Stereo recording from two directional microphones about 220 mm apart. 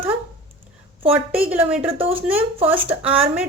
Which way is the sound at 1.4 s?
5° right (ahead or behind).